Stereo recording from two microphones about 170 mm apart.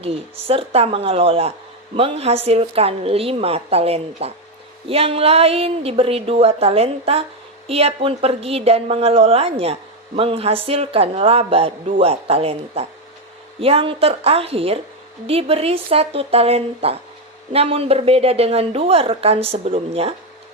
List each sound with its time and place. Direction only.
0.0 s a woman's voice: 35° right (ahead or behind)